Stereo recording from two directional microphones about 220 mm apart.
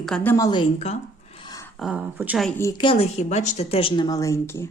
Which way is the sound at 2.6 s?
15° left (ahead or behind).